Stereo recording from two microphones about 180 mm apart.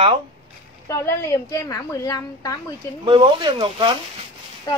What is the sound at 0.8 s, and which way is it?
A woman's voice, 15° left (ahead or behind).